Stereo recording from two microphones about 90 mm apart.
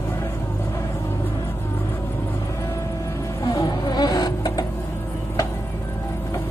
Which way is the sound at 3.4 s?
40° left (ahead or behind).